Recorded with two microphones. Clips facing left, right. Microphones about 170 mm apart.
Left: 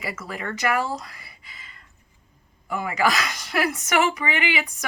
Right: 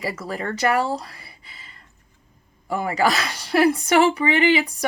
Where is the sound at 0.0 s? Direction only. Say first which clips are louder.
Right 4 dB; 35° right (ahead or behind).